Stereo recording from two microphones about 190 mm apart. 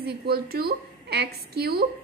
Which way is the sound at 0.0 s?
55° right (ahead or behind).